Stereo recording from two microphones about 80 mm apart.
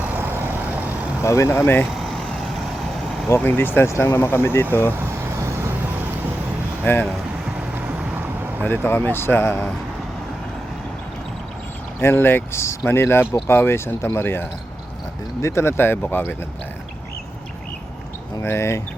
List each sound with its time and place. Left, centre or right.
0.0 s vehicle: right
1.2 s speech: left
2.0 s vehicle: centre
3.2 s speech: left
4.9 s vehicle: right
6.8 s speech: left
7.8 s vehicle: right
8.6 s speech: left
11.9 s speech: left
18.4 s speech: left